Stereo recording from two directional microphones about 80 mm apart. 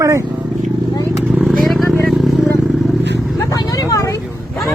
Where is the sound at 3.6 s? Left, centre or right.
Left.